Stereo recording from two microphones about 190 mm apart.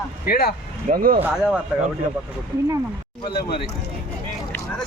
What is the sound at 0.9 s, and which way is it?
Speech, 50° right (ahead or behind).